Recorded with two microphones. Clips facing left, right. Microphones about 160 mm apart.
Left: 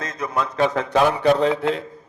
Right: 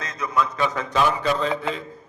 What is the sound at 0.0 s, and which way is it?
A man's voice, 55° left (ahead or behind).